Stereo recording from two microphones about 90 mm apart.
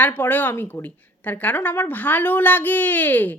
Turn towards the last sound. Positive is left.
turn(degrees=20)  # may be behind; listen again after turning